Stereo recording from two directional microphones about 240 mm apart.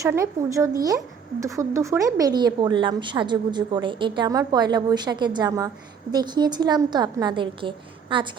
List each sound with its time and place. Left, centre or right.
0.0 s a woman's voice: centre